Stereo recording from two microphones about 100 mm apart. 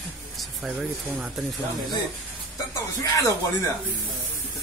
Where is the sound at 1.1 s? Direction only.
Centre (ahead or behind).